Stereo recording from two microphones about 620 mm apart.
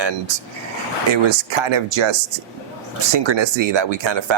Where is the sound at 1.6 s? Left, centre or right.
Right.